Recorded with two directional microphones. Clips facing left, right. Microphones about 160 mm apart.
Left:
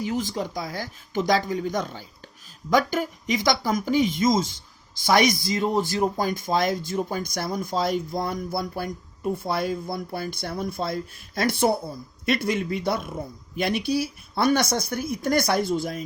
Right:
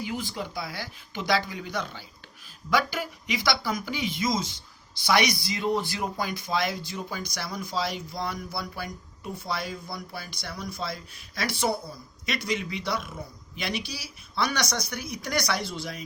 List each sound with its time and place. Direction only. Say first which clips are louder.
0.0 s speech: left 6 dB; 40° left (ahead or behind)